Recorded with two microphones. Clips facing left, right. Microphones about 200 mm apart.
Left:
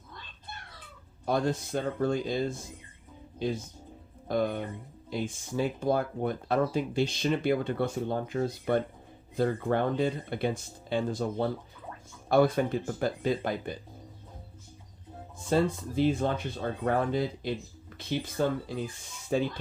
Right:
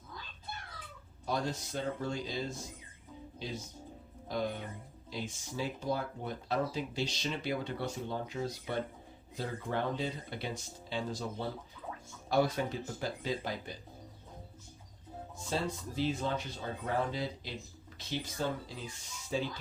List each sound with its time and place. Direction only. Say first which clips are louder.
1.2 s speech: left 7 dB; 55° left (ahead or behind)
15.4 s speech: left 9 dB; 55° left (ahead or behind)